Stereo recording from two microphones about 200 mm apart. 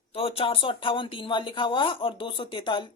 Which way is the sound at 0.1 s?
30° left (ahead or behind).